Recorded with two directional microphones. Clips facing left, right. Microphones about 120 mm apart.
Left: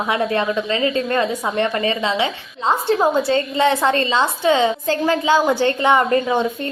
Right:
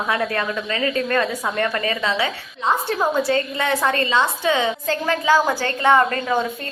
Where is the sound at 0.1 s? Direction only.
25° left (ahead or behind).